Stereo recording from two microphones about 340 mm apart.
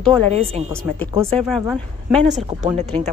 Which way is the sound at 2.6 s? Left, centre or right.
Centre.